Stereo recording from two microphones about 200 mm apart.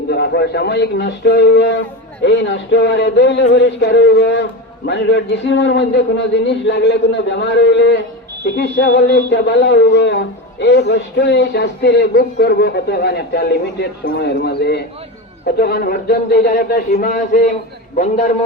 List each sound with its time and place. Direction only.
0.1 s a man's voice: 55° left (ahead or behind); by 18.3 s 40° left (ahead or behind)